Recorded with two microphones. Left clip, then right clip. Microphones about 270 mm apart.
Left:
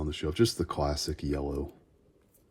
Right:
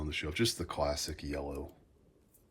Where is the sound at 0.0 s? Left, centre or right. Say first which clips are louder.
Left 5 dB; centre.